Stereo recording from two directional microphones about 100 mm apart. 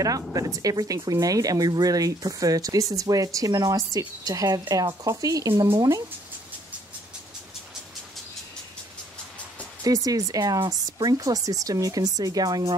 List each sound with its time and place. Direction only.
0.0 s speech: 35° right (ahead or behind)
9.8 s speech: 35° right (ahead or behind)